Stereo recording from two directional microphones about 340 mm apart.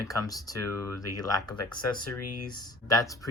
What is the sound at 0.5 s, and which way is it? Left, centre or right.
Speech, left.